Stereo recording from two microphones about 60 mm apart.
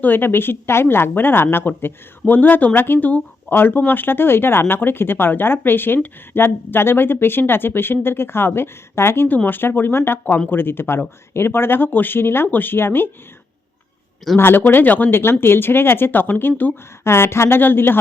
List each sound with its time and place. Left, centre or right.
0.0 s speech: left
14.3 s speech: left
17.0 s speech: left